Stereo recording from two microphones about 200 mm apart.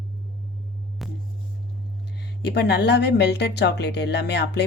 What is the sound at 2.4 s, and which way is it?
Speech, 55° left (ahead or behind).